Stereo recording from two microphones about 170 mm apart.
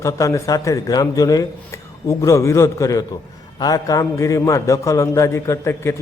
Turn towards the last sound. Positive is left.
turn(degrees=15)  # may be behind; listen again after turning